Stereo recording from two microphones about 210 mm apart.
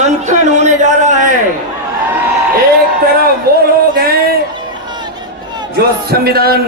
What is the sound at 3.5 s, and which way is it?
Speech, 45° right (ahead or behind).